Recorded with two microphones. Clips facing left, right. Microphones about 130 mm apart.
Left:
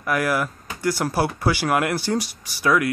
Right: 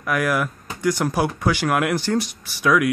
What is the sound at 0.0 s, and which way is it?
Speech, 5° left (ahead or behind).